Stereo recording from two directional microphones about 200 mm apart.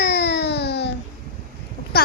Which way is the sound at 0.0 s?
60° left (ahead or behind).